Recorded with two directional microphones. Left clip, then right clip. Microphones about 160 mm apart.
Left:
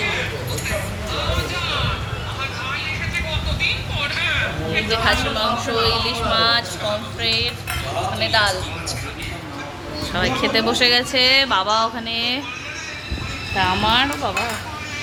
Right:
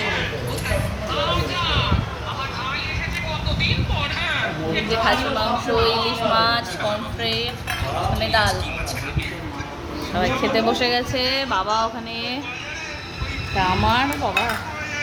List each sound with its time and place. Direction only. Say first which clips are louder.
4.7 s a woman's voice: left 1 dB; 10° right (ahead or behind)
10.2 s speech: left 1 dB; 5° right (ahead or behind)
13.6 s speech: left 2 dB; centre (ahead or behind)